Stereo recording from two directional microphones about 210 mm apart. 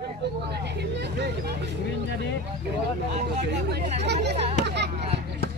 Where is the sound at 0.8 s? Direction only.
55° right (ahead or behind).